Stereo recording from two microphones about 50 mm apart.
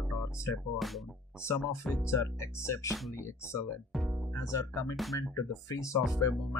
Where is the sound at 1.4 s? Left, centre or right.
Left.